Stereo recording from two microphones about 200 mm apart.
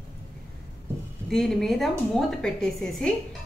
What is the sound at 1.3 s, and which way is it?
Speech, centre (ahead or behind).